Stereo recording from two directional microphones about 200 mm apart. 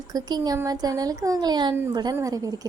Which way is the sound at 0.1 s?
20° right (ahead or behind).